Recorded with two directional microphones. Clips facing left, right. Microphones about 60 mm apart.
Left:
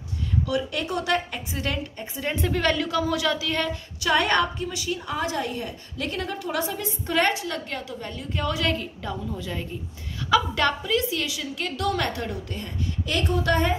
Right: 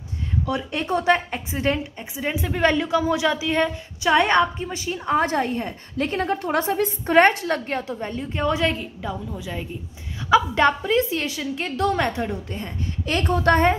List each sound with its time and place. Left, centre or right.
0.5 s a woman's voice: right
2.1 s a woman's voice: centre
2.5 s a woman's voice: right
8.7 s a woman's voice: centre
10.3 s a woman's voice: right